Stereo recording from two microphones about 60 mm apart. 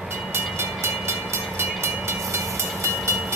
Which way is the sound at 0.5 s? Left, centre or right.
Right.